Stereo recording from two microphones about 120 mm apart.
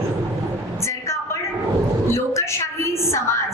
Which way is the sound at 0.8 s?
25° left (ahead or behind).